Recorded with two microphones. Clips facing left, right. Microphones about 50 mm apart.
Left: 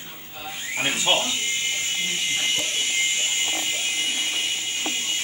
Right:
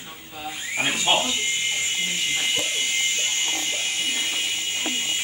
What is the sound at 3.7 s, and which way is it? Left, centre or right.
Music, centre.